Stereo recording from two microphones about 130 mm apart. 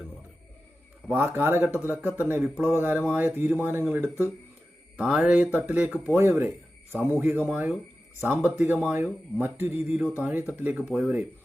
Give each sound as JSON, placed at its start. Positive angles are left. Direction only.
{"t": 1.0, "sound": "speech", "side_deg": -15}